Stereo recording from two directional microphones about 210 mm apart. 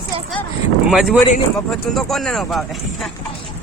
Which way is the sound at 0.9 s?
Centre (ahead or behind).